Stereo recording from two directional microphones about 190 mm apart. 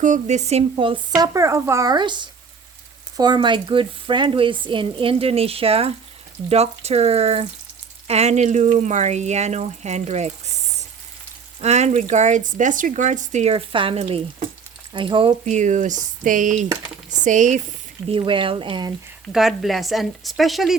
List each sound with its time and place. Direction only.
0.0 s speech: 40° right (ahead or behind)
15.4 s speech: 40° right (ahead or behind)
18.1 s speech: 25° right (ahead or behind)
19.3 s speech: centre (ahead or behind)